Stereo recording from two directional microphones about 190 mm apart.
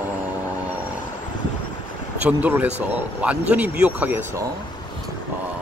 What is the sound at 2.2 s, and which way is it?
Speech, 10° right (ahead or behind).